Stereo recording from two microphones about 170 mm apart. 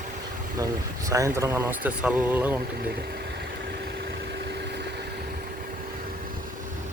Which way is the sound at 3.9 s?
75° right (ahead or behind).